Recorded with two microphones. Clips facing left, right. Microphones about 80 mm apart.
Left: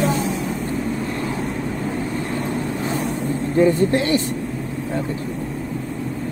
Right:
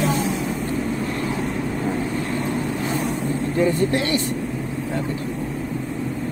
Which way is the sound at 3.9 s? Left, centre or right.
Left.